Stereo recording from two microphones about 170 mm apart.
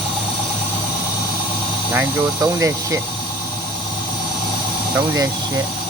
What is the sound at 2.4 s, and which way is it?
Speech, 20° right (ahead or behind).